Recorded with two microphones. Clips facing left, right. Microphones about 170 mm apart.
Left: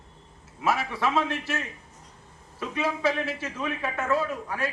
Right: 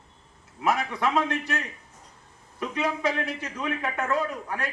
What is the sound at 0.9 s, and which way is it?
Speech, 15° right (ahead or behind).